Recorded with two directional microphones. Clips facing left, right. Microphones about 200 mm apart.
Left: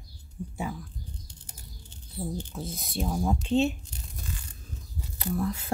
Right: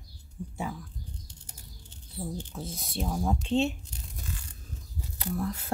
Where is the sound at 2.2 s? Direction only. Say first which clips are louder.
Left 2 dB; 10° left (ahead or behind).